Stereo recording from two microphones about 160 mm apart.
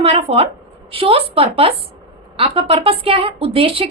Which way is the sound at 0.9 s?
35° right (ahead or behind).